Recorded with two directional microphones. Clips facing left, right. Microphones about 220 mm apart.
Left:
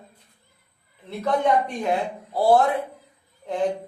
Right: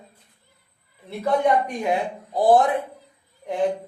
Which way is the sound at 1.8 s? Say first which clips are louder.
Right 1 dB; 15° right (ahead or behind).